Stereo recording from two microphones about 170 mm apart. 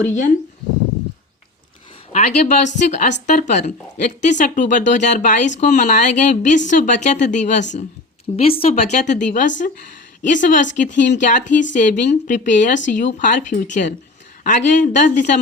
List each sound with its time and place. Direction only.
0.0 s a woman's voice: 45° left (ahead or behind)
2.1 s a woman's voice: 45° left (ahead or behind)
8.4 s a woman's voice: 35° left (ahead or behind)